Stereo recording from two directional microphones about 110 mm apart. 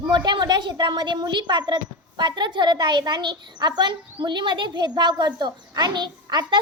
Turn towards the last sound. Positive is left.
turn(degrees=-40)  # may be behind; listen again after turning